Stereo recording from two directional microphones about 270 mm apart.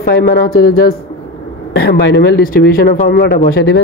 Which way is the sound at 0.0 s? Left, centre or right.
Left.